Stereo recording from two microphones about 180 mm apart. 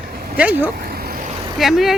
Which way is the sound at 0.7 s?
55° right (ahead or behind).